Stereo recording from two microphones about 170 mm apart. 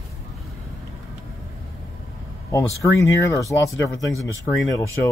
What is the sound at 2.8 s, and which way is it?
Speech, 15° left (ahead or behind).